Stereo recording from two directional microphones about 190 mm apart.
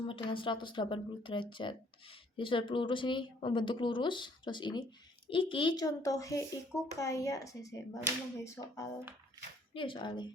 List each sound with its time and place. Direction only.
0.0 s speech: 30° left (ahead or behind)
9.7 s speech: 25° left (ahead or behind)